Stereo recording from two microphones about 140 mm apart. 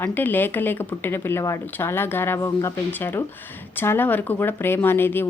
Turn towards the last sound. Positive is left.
turn(degrees=15)  # may be behind; listen again after turning